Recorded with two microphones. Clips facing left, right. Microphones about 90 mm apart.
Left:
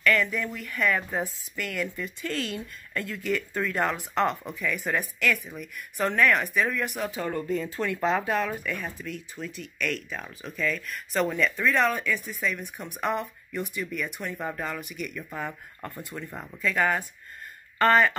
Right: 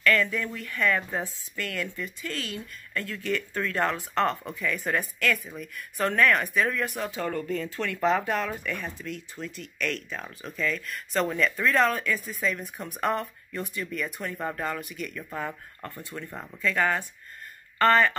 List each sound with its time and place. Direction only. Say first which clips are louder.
0.0 s speech: even; 10° left (ahead or behind)
8.0 s speech: right 1 dB; 5° left (ahead or behind)
15.8 s speech: left 3 dB; 20° left (ahead or behind)
16.2 s speech: right 1 dB; 5° left (ahead or behind)